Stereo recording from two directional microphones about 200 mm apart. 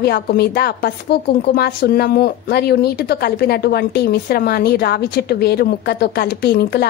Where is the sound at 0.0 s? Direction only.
50° left (ahead or behind).